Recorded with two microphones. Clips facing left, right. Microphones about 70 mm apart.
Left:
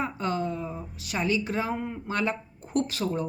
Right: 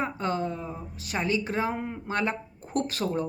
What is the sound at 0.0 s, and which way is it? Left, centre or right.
Speech, right.